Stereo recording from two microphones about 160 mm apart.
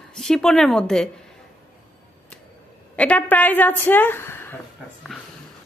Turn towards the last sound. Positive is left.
turn(degrees=15)  # may be behind; listen again after turning